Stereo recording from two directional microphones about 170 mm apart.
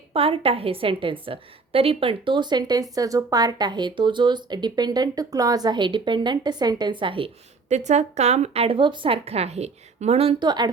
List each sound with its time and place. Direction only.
0.1 s a woman's voice: 35° right (ahead or behind)
7.7 s a woman's voice: 45° right (ahead or behind); by 10.7 s 25° right (ahead or behind)